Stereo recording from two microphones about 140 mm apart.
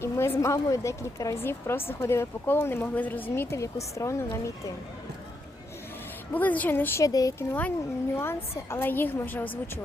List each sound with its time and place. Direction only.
0.0 s a woman's voice: 20° left (ahead or behind)
6.3 s a woman's voice: 10° left (ahead or behind)